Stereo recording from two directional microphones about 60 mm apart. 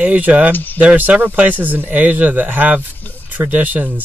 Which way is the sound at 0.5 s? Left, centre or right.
Left.